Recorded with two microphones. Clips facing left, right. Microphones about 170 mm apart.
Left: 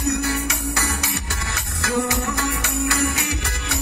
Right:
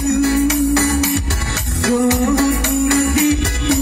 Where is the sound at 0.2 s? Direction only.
30° right (ahead or behind).